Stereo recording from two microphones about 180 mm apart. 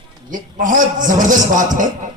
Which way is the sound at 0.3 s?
45° right (ahead or behind).